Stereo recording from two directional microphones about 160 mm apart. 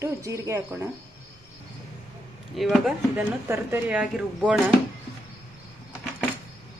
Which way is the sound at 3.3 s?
15° right (ahead or behind).